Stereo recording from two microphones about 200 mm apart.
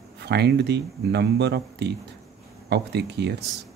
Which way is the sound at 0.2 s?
55° right (ahead or behind).